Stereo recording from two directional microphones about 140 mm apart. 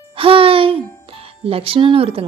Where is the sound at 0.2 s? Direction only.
40° right (ahead or behind).